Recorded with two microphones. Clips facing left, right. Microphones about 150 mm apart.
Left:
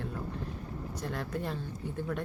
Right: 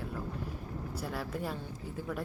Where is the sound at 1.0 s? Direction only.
5° right (ahead or behind).